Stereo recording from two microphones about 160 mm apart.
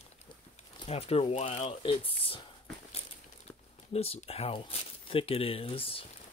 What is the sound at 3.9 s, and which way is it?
Speech, 40° left (ahead or behind).